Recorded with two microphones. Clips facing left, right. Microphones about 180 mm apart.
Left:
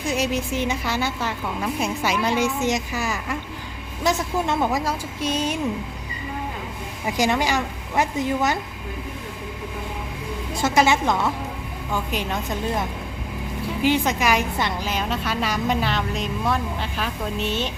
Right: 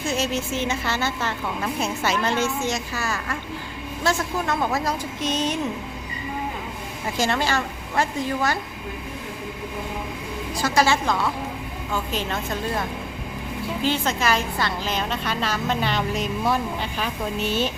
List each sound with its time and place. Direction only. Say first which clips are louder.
0.0 s a woman's voice: left 1 dB; 15° left (ahead or behind)
7.2 s a woman's voice: left 2 dB; 15° left (ahead or behind)
10.5 s a woman's voice: left 2 dB; 20° left (ahead or behind)
13.8 s a woman's voice: left 3 dB; 15° left (ahead or behind)
15.8 s speech: right 1 dB; centre (ahead or behind)